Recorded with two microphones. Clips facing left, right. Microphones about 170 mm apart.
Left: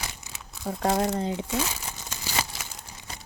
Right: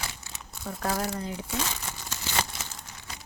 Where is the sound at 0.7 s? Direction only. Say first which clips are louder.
Left 5 dB; 25° left (ahead or behind).